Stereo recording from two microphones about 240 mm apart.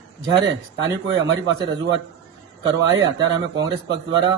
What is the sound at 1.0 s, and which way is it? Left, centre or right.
Speech, centre.